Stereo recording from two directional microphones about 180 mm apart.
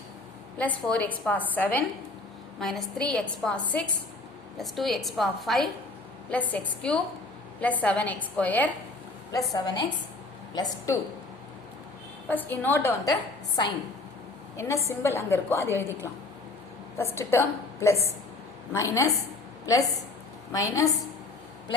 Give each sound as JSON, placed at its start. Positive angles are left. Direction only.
{"t": 0.6, "sound": "a woman's voice", "side_deg": 10}
{"t": 9.5, "sound": "a woman's voice", "side_deg": 20}
{"t": 12.3, "sound": "a woman's voice", "side_deg": 10}
{"t": 14.5, "sound": "a woman's voice", "side_deg": 15}
{"t": 17.0, "sound": "a woman's voice", "side_deg": 15}